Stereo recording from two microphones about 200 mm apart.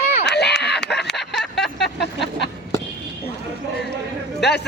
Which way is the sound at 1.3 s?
Centre (ahead or behind).